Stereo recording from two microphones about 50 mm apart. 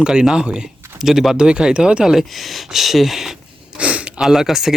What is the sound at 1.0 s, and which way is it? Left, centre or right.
Speech, centre.